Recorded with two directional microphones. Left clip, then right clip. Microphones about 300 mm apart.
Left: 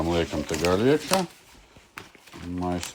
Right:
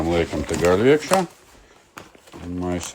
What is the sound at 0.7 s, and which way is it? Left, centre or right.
Speech, centre.